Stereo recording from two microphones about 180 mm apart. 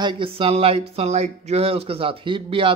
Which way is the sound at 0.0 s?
30° right (ahead or behind).